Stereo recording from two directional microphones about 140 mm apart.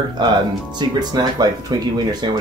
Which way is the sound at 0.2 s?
30° right (ahead or behind).